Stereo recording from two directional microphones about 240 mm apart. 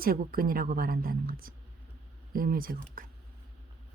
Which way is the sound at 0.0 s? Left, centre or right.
Right.